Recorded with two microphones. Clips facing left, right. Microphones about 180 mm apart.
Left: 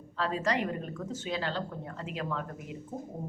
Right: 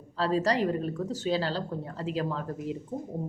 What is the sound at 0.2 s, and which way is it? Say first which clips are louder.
Speech: right 4 dB; 35° right (ahead or behind).